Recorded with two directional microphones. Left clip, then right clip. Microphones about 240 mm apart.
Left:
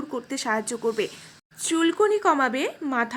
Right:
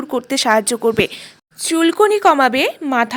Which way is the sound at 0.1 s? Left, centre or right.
Right.